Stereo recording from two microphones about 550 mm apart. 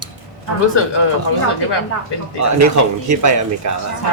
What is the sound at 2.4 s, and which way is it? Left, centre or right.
Speech, right.